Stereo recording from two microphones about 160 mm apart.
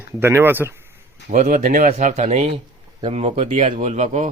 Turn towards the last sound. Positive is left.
turn(degrees=-45)  # may be behind; listen again after turning